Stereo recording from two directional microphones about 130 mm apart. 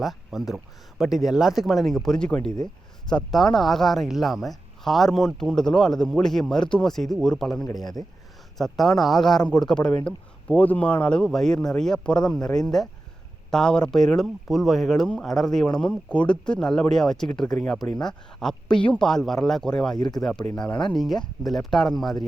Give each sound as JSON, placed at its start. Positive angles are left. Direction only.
{"t": 0.0, "sound": "speech", "side_deg": 0}
{"t": 7.7, "sound": "speech", "side_deg": 30}
{"t": 8.5, "sound": "speech", "side_deg": 0}
{"t": 20.0, "sound": "speech", "side_deg": 30}
{"t": 20.9, "sound": "speech", "side_deg": 0}